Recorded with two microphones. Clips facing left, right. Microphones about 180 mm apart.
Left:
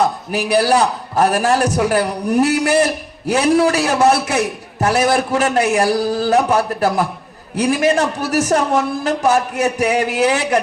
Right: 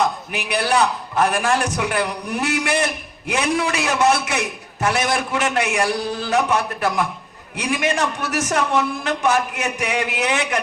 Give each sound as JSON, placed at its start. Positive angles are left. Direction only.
{"t": 0.0, "sound": "a man's voice", "side_deg": 35}